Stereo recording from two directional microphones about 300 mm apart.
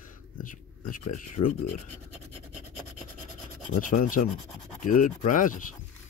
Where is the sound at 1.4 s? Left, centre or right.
Left.